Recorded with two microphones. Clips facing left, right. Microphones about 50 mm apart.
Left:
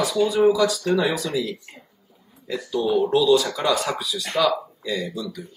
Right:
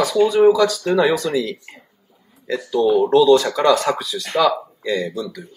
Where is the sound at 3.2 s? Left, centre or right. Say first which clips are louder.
Right 5 dB; right.